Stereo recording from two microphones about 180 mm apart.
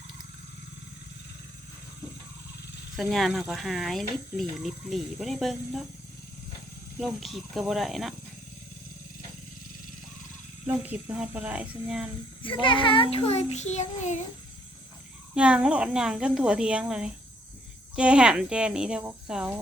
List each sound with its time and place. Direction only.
2.9 s speech: centre (ahead or behind)
7.0 s speech: centre (ahead or behind)
10.7 s speech: 5° right (ahead or behind)
12.4 s a child's voice: 30° left (ahead or behind)
15.4 s speech: 5° right (ahead or behind)